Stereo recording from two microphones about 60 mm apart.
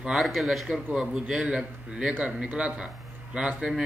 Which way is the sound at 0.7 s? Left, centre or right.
Centre.